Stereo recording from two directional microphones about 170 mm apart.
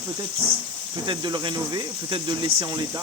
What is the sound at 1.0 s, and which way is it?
Speech, 25° right (ahead or behind).